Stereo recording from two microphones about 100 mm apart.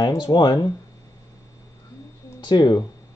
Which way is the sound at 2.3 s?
45° left (ahead or behind).